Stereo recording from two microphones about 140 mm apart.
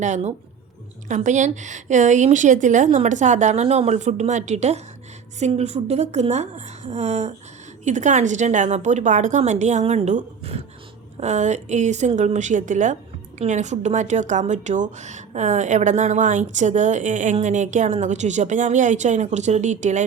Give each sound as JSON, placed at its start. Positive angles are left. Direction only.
{"t": 0.0, "sound": "a woman's voice", "side_deg": -55}